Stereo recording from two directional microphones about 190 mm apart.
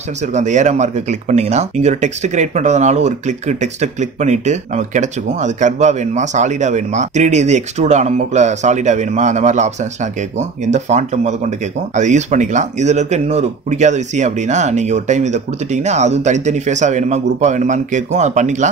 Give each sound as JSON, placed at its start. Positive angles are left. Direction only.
{"t": 0.3, "sound": "speech", "side_deg": -40}